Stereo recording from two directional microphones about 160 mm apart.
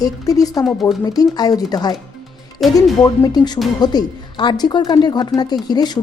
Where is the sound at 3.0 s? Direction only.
25° left (ahead or behind).